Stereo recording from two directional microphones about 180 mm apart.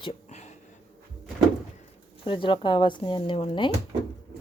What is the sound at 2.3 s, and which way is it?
Speech, 30° left (ahead or behind).